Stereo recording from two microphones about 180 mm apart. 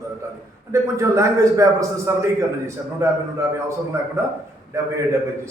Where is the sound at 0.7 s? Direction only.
15° right (ahead or behind).